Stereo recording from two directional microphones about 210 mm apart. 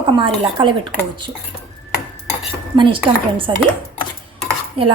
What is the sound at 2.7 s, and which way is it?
Speech, 25° right (ahead or behind).